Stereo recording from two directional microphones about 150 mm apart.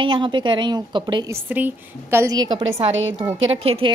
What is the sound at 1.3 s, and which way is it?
A woman's voice, 10° right (ahead or behind).